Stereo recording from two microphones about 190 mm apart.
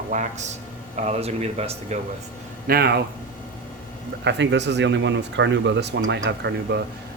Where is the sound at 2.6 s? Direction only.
55° right (ahead or behind).